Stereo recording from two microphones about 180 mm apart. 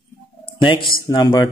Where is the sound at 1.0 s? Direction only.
25° left (ahead or behind).